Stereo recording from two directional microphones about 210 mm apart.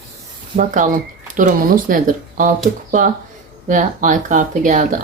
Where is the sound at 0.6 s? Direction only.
40° right (ahead or behind).